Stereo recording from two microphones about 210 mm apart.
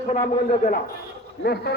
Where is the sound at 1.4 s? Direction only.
50° left (ahead or behind).